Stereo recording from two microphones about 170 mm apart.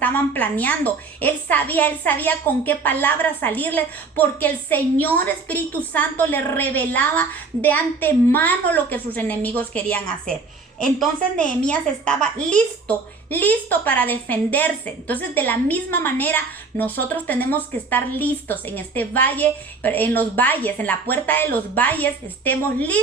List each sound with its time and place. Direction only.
0.0 s a woman's voice: 10° left (ahead or behind)